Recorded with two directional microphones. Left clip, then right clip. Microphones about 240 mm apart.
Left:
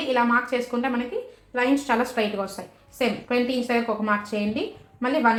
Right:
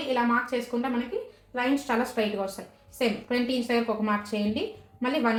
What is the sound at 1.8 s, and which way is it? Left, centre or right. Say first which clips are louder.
A woman's voice: left 4 dB; left.